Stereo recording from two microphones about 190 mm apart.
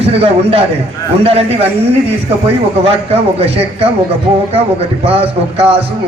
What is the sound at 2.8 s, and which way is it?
Speech, 30° right (ahead or behind).